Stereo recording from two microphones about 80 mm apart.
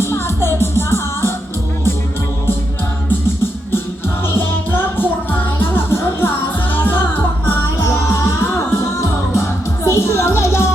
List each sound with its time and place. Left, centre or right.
0.0 s music: left
4.9 s music: left